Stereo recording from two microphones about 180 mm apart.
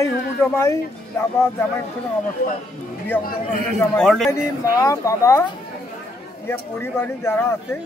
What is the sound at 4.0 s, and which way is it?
Speech, centre (ahead or behind).